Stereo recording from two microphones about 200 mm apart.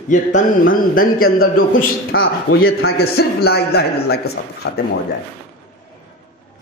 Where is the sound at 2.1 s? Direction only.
85° left.